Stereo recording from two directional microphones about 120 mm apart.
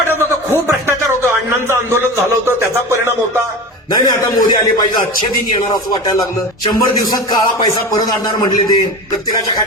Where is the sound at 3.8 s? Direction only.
35° left (ahead or behind).